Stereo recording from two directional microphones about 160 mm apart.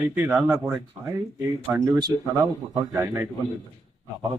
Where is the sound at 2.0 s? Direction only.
25° right (ahead or behind).